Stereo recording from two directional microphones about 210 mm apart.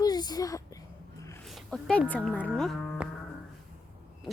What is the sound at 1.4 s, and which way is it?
Speech, centre (ahead or behind).